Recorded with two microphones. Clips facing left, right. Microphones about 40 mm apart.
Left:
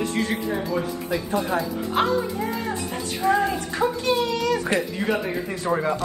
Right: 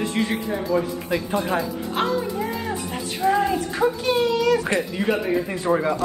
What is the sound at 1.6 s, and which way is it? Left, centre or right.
Music, centre.